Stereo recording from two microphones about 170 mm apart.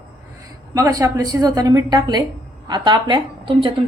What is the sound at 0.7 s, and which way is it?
A woman's voice, 20° right (ahead or behind).